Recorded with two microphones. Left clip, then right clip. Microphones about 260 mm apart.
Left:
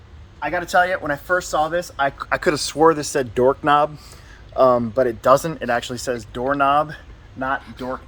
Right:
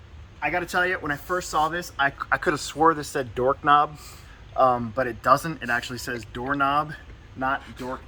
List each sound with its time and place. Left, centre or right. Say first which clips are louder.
0.3 s speech: left 6 dB; centre